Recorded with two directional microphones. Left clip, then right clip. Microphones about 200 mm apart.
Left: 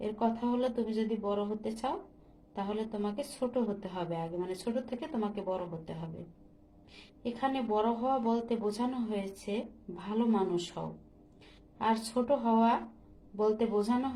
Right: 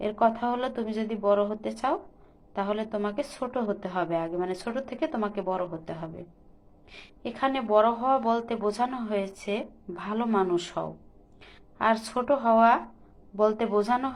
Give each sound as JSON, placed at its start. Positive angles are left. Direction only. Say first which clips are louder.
{"t": 0.0, "sound": "speech", "louder": "right 8 dB", "side_deg": -20}
{"t": 6.9, "sound": "speech", "louder": "right 3 dB", "side_deg": -20}